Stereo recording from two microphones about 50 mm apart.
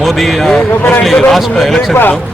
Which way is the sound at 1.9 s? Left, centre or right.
Left.